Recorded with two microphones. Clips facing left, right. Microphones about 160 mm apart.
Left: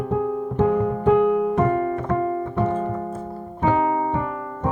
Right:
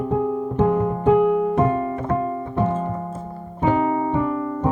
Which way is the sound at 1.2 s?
15° right (ahead or behind).